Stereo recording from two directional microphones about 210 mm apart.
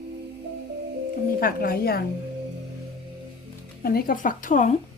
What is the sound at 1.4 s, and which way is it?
Speech, 45° left (ahead or behind).